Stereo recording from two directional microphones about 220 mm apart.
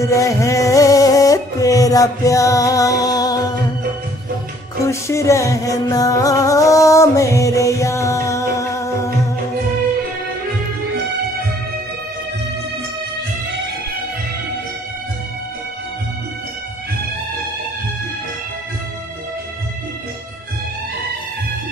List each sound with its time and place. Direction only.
0.0 s music: 15° left (ahead or behind)
4.8 s music: 15° left (ahead or behind)